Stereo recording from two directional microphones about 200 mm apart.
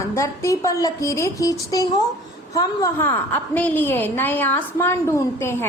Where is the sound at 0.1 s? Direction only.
15° left (ahead or behind).